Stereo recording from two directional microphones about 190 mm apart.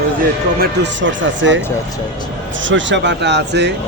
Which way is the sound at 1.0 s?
75° right (ahead or behind).